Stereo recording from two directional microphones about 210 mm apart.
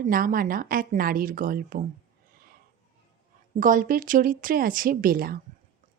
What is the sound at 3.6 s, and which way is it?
Speech, 40° right (ahead or behind).